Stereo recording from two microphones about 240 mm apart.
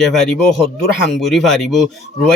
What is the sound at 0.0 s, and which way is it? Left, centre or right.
Speech, centre.